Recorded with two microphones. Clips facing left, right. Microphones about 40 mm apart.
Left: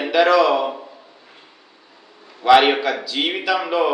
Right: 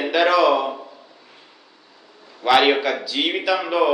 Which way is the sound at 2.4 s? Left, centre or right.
Centre.